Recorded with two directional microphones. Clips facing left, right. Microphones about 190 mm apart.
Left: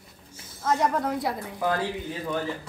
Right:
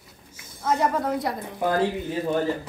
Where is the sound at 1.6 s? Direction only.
25° right (ahead or behind).